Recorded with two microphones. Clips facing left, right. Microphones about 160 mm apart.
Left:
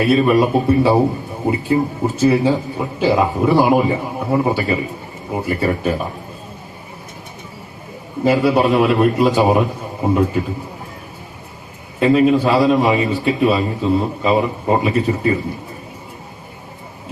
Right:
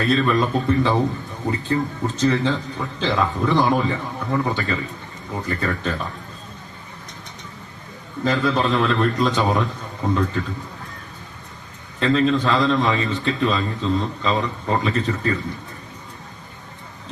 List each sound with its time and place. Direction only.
0.0 s a man's voice: 15° left (ahead or behind)
8.2 s a man's voice: 10° left (ahead or behind)
11.9 s a man's voice: 15° left (ahead or behind)